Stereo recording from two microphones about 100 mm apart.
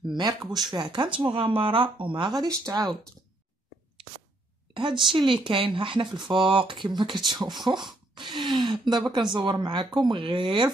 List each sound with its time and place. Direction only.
0.1 s speech: 45° right (ahead or behind)
1.2 s speech: 60° right (ahead or behind)
2.4 s speech: 40° right (ahead or behind)
5.1 s speech: 55° right (ahead or behind)